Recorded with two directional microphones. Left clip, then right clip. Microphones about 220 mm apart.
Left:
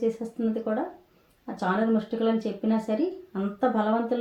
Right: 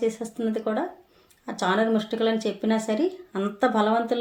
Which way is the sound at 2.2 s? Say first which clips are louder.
Right 2 dB; 35° right (ahead or behind).